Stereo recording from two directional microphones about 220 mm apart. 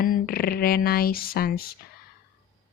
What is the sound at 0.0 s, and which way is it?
Speech, 40° left (ahead or behind).